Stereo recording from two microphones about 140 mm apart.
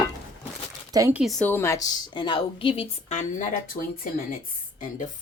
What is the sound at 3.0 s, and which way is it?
Speech, 60° left (ahead or behind).